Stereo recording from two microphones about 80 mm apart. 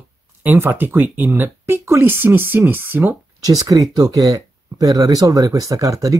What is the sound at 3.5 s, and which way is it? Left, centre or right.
Speech, right.